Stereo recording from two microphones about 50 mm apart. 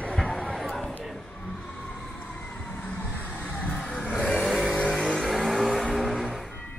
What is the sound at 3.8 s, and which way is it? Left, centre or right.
Vehicle, centre.